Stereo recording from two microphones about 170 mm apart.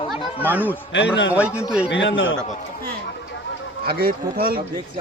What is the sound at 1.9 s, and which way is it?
Speech, 90° left.